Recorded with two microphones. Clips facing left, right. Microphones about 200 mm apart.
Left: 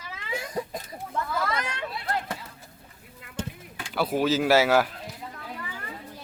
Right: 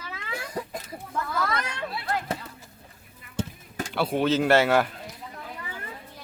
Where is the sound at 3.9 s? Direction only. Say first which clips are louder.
Even; centre (ahead or behind).